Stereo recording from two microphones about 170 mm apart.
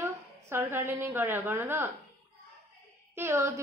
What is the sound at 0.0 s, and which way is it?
A woman's voice, 15° right (ahead or behind).